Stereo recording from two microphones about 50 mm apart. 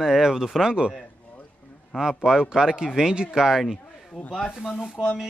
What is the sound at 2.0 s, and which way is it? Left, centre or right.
A man's voice, centre.